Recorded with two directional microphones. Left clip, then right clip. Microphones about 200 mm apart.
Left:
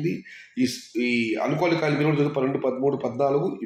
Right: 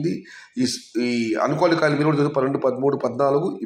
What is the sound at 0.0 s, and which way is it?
A man's voice, 20° right (ahead or behind).